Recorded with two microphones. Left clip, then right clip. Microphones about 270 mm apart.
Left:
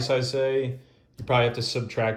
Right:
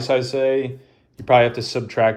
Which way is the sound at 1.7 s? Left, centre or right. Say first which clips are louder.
Right 8 dB; centre.